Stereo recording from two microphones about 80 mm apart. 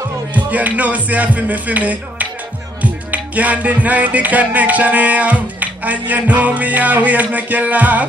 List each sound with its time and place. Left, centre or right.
0.3 s music: centre